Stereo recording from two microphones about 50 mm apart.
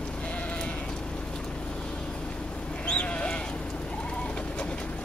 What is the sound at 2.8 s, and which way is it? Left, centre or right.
Sheep, left.